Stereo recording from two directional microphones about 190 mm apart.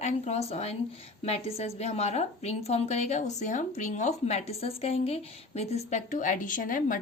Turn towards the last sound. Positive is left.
turn(degrees=45)  # may be behind; listen again after turning